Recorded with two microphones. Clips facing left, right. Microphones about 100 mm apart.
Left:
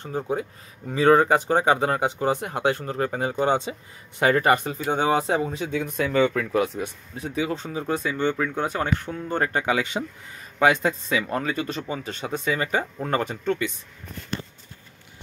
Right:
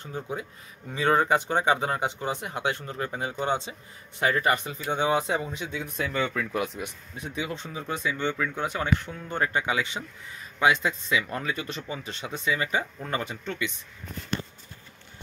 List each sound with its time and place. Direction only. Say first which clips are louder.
0.0 s speech: left 7 dB; 35° left (ahead or behind)
5.8 s speech: left 8 dB; 55° left (ahead or behind)
6.6 s speech: left 5 dB; 40° left (ahead or behind)